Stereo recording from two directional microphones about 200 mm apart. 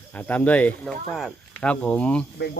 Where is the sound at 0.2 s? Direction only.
10° left (ahead or behind).